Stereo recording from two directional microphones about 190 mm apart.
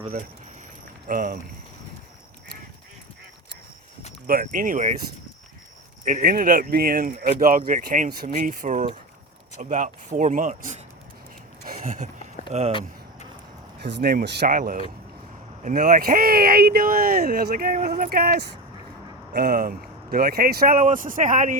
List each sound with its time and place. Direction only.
1.0 s speech: 45° right (ahead or behind)
4.3 s speech: 45° right (ahead or behind)
6.1 s speech: 45° right (ahead or behind)
11.6 s a sound: 45° right (ahead or behind)
12.5 s speech: 35° right (ahead or behind)
13.7 s speech: 65° right (ahead or behind); by 21.6 s 45° right (ahead or behind)